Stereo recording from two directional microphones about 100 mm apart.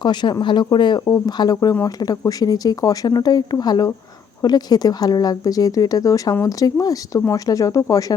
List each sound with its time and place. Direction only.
0.0 s speech: 50° left (ahead or behind)